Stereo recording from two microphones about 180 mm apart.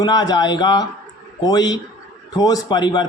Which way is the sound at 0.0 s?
25° left (ahead or behind).